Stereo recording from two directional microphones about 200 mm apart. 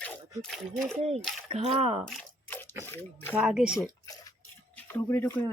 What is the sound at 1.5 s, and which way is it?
Speech, 30° right (ahead or behind).